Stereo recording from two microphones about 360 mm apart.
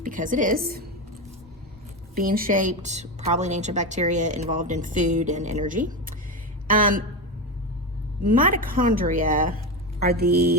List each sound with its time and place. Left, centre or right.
0.0 s a woman's voice: right
2.1 s a woman's voice: right
8.2 s a woman's voice: right